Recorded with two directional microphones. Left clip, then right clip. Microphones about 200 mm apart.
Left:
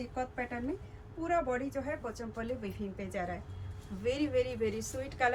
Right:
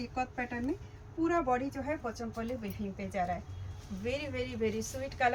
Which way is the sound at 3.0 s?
20° left (ahead or behind).